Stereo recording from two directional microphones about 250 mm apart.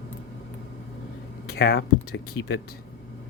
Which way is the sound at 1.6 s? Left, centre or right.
Left.